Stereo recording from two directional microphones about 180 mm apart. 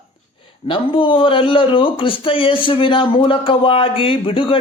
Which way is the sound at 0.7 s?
30° left (ahead or behind).